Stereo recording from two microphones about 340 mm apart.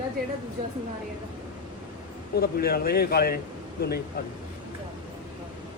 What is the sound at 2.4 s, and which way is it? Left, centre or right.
A man's voice, left.